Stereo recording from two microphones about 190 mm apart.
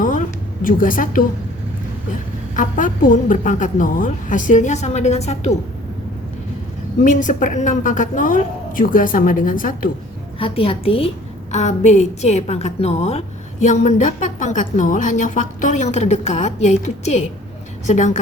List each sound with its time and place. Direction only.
0.0 s a sound: 45° left (ahead or behind)
2.6 s a woman's voice: 45° left (ahead or behind)
7.0 s a woman's voice: 45° left (ahead or behind)
10.4 s a woman's voice: 30° left (ahead or behind)